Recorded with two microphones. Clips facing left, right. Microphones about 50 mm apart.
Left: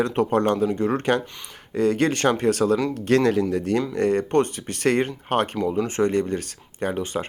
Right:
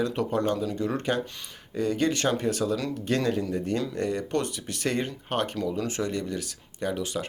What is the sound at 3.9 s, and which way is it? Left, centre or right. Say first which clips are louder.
Speech: left 8 dB; left.